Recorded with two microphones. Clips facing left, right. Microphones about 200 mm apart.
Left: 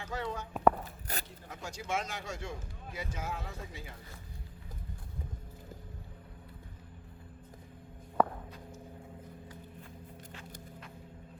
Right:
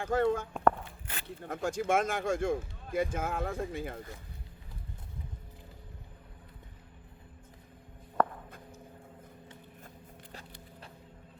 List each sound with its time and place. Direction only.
0.0 s speech: 50° right (ahead or behind)
1.1 s zipper: 40° left (ahead or behind)
1.5 s speech: 50° right (ahead or behind)
8.2 s a sound: 5° left (ahead or behind)